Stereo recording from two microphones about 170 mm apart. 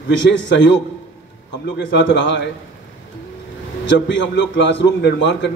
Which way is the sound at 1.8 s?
90° left.